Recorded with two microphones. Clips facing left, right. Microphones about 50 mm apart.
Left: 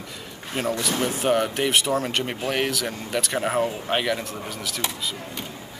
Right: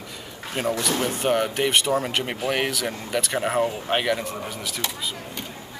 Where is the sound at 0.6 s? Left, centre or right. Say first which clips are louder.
Even; centre.